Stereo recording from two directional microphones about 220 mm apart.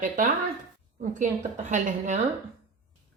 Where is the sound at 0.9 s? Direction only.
35° right (ahead or behind).